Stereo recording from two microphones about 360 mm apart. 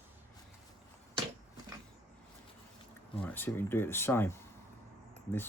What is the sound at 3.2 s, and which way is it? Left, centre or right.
Speech, centre.